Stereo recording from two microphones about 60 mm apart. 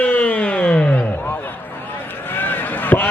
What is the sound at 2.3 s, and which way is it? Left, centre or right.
Run, left.